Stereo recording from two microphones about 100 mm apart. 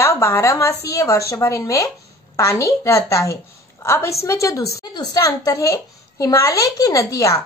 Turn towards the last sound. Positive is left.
turn(degrees=30)  # may be behind; listen again after turning